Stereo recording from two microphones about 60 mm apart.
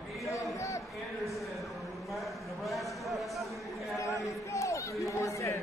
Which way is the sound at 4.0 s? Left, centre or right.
Left.